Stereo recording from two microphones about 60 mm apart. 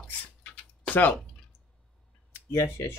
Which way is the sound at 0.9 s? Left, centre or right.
Left.